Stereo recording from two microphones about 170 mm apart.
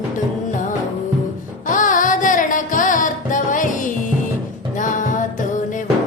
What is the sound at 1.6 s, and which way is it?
Music, 50° left (ahead or behind).